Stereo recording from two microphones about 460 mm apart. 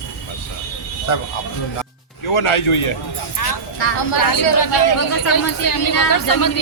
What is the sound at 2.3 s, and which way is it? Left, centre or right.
Speech, left.